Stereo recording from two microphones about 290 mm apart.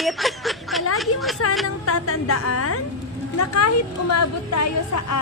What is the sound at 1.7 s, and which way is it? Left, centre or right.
A woman's voice, left.